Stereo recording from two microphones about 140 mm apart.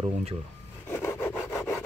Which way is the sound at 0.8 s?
15° left (ahead or behind).